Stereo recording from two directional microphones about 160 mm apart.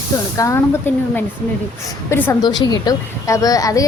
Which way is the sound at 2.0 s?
10° left (ahead or behind).